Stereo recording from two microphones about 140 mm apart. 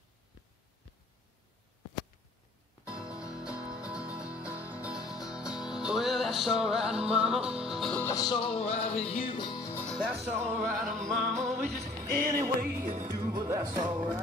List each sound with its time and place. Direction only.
2.9 s music: 5° right (ahead or behind)
8.1 s music: 30° left (ahead or behind); by 9.3 s 45° left (ahead or behind)
9.4 s music: 30° left (ahead or behind)
10.2 s music: 20° right (ahead or behind)
10.8 s music: 65° right (ahead or behind)
11.1 s music: centre (ahead or behind)
12.2 s music: 90° right
12.7 s speech: 20° right (ahead or behind)
13.8 s music: 10° right (ahead or behind)